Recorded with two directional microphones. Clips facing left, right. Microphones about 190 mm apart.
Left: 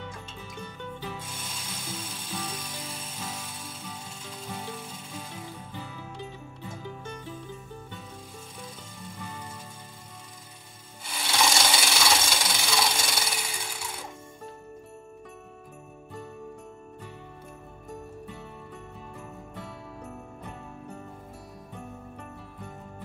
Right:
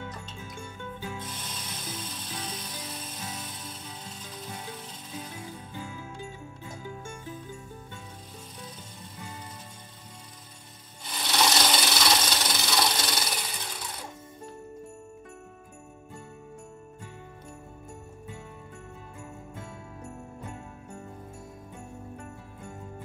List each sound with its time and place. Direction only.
1.2 s music: 10° left (ahead or behind)
4.5 s music: 25° left (ahead or behind)
4.7 s music: 10° left (ahead or behind)
11.1 s wood: 10° left (ahead or behind)